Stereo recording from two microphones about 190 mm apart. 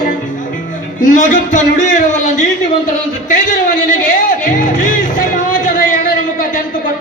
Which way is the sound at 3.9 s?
45° left (ahead or behind).